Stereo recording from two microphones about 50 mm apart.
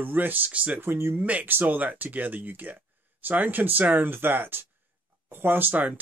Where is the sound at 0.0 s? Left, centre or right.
Right.